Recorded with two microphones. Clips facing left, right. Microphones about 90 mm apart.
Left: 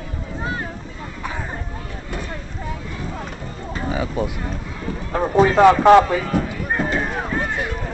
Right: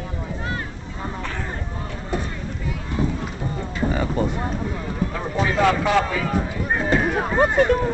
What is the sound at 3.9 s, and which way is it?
Speech, 5° left (ahead or behind).